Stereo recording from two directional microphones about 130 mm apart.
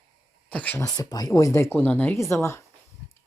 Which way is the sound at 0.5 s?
10° left (ahead or behind).